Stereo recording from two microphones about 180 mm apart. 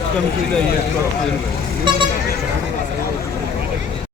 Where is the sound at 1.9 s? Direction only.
25° right (ahead or behind).